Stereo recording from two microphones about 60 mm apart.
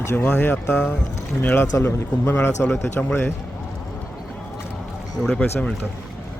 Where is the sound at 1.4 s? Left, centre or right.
Left.